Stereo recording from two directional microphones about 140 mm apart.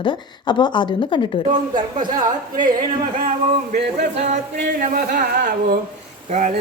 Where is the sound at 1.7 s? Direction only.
30° right (ahead or behind).